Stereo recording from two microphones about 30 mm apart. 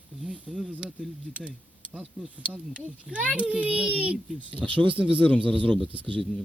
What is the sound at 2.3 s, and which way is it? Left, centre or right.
Speech, right.